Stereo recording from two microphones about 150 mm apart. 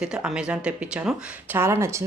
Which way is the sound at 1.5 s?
15° right (ahead or behind).